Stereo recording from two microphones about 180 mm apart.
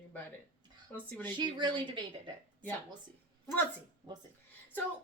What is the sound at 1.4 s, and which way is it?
Speech, 25° right (ahead or behind).